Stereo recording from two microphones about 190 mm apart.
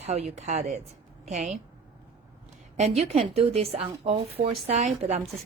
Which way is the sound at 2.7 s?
35° right (ahead or behind).